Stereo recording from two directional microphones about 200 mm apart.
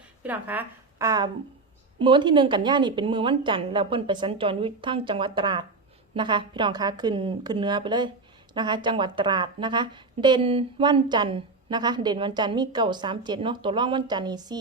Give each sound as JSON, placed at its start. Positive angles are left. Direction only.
{"t": 0.2, "sound": "a woman's voice", "side_deg": -10}